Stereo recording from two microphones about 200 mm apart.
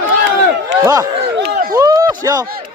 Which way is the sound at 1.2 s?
60° right (ahead or behind).